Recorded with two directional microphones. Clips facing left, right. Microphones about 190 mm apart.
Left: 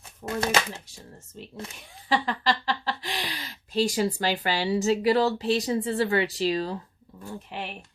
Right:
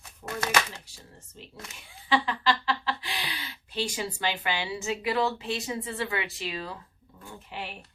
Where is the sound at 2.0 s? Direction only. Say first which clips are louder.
Left 1 dB; 40° left (ahead or behind).